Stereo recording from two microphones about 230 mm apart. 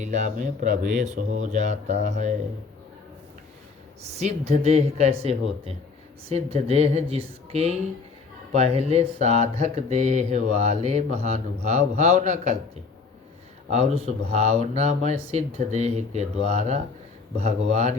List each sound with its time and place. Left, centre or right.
0.0 s speech: right
4.0 s speech: right
13.7 s speech: right